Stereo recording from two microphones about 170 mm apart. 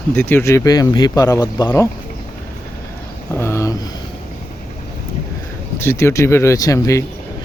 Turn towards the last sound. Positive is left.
turn(degrees=20)  # may be behind; listen again after turning